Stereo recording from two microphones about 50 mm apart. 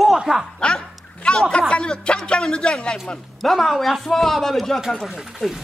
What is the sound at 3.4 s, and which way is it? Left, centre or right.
Speech, centre.